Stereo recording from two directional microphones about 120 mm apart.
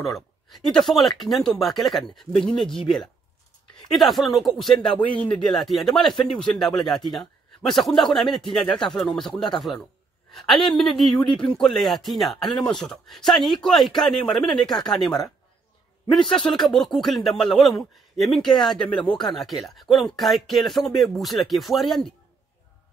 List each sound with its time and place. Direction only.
0.0 s speech: centre (ahead or behind)
5.1 s speech: 10° left (ahead or behind)
5.6 s speech: centre (ahead or behind)
16.3 s speech: 5° left (ahead or behind)
18.8 s speech: 40° left (ahead or behind)
19.1 s speech: centre (ahead or behind)